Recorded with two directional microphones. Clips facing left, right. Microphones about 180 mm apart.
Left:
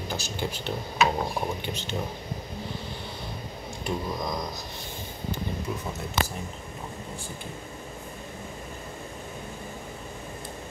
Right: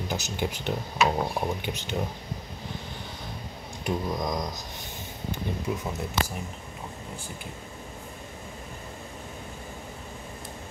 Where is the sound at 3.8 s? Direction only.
15° right (ahead or behind).